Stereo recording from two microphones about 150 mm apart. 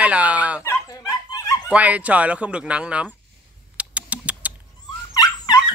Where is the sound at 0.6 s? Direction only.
15° left (ahead or behind).